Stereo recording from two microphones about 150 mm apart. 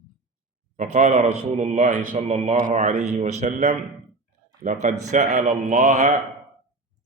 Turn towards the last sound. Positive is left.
turn(degrees=-55)  # may be behind; listen again after turning